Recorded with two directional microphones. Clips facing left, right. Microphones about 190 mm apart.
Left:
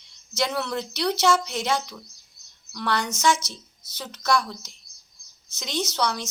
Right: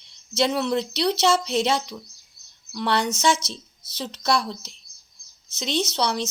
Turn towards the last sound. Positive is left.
turn(degrees=-20)  # may be behind; listen again after turning